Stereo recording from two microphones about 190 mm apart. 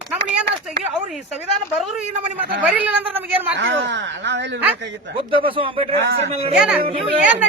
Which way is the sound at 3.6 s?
65° right (ahead or behind).